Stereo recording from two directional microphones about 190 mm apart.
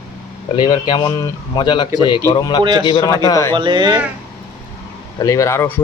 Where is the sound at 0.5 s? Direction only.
20° left (ahead or behind).